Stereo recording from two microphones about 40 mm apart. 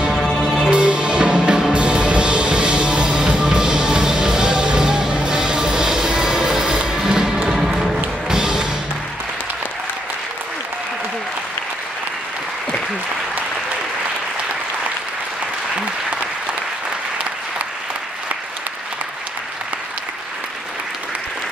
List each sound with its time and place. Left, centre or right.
0.1 s music: centre
0.7 s music: right
7.5 s music: centre
8.3 s music: centre